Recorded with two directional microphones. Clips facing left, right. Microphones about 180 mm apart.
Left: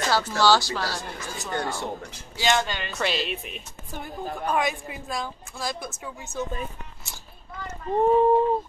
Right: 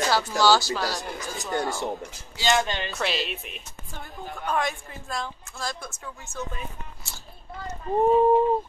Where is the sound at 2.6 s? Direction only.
20° right (ahead or behind).